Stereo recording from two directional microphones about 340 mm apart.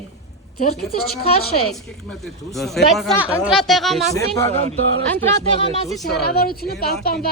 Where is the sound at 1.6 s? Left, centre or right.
Centre.